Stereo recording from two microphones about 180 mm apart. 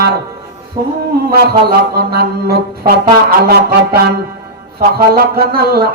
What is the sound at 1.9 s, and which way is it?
Speech, 60° right (ahead or behind).